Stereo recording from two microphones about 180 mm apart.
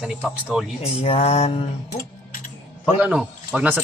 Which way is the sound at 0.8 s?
35° left (ahead or behind).